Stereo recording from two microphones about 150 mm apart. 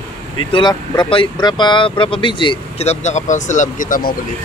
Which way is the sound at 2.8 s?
50° left (ahead or behind).